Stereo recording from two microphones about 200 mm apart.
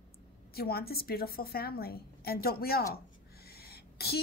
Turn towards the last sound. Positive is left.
turn(degrees=50)  # may be behind; listen again after turning